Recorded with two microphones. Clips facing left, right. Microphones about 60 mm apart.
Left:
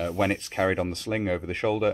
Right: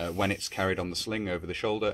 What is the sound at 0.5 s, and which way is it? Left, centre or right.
Speech, left.